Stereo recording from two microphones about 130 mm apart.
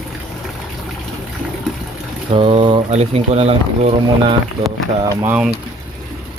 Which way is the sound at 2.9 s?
55° right (ahead or behind).